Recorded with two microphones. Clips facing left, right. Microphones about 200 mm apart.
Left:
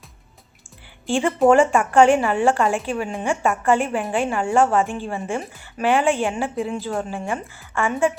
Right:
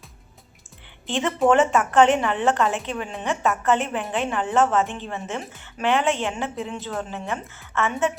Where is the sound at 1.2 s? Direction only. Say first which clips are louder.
Left 3 dB; centre (ahead or behind).